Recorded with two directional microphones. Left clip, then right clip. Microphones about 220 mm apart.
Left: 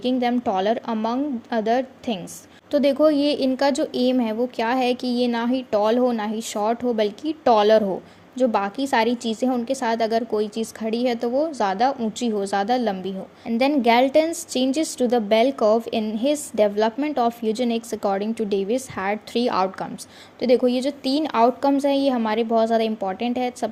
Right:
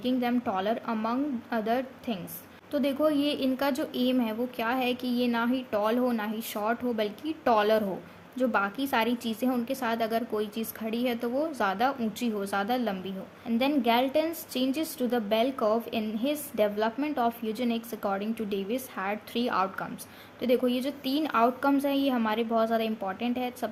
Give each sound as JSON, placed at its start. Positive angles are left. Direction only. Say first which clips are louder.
{"t": 0.0, "sound": "a woman's voice", "louder": "left 7 dB", "side_deg": 20}